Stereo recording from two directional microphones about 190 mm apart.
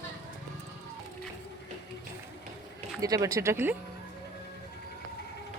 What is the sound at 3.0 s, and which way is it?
Speech, 20° right (ahead or behind).